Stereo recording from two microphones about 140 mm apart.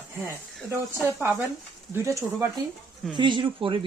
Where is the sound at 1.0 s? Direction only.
15° right (ahead or behind).